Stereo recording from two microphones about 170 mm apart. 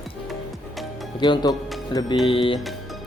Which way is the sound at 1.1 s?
25° left (ahead or behind).